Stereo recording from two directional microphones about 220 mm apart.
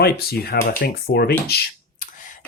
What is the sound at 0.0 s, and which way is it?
Speech, 45° left (ahead or behind).